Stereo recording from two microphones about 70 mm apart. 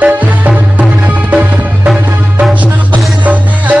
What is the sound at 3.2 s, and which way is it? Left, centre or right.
Music, right.